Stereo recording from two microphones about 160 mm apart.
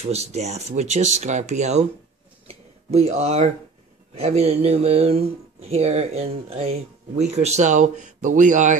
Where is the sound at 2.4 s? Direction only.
40° right (ahead or behind).